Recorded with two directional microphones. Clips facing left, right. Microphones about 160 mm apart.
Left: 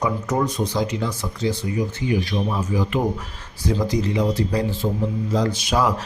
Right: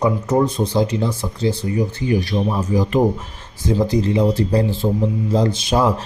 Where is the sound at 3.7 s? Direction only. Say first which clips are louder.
Right 4 dB; 25° right (ahead or behind).